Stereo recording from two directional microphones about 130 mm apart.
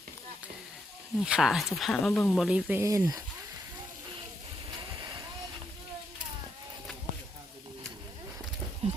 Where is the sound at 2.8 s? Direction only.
25° right (ahead or behind).